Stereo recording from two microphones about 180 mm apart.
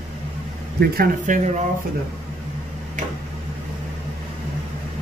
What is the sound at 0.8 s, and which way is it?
Speech, 55° right (ahead or behind).